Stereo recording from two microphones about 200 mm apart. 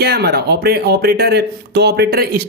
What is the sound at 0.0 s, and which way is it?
A man's voice, 50° right (ahead or behind).